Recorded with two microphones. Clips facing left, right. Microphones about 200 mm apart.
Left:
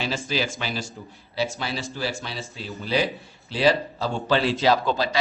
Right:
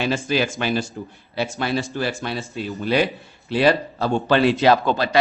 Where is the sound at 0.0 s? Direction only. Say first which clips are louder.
Right 5 dB; 55° right (ahead or behind).